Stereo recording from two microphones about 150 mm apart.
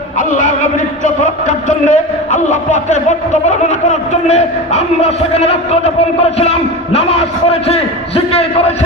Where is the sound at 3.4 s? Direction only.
50° left (ahead or behind).